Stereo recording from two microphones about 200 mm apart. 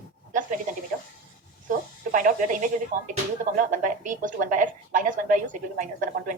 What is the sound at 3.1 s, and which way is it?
Speech, 40° right (ahead or behind).